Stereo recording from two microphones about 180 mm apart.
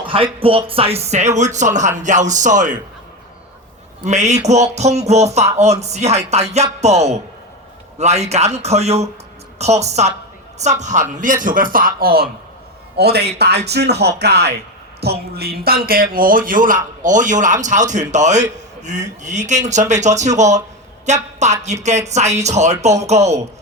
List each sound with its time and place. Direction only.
0.0 s speech: 30° right (ahead or behind)
4.0 s a man's voice: 40° right (ahead or behind)